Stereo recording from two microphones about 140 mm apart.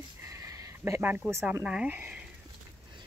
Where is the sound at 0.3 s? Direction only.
20° right (ahead or behind).